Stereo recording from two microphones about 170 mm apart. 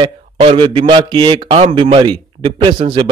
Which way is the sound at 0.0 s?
30° right (ahead or behind).